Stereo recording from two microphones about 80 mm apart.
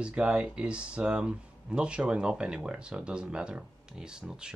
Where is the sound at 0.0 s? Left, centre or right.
Centre.